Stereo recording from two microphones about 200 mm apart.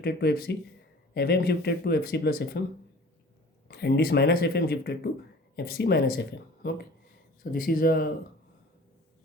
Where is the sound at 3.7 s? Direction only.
55° left (ahead or behind).